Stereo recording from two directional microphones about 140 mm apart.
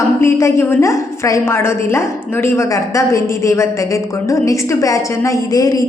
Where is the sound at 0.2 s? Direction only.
20° left (ahead or behind).